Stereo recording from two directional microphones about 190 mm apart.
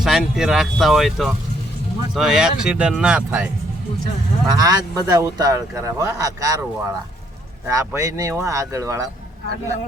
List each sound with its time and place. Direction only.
0.0 s speech: 5° right (ahead or behind)
4.5 s speech: 20° right (ahead or behind)